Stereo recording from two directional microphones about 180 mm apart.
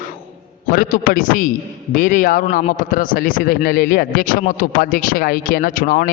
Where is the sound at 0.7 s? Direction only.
50° left (ahead or behind).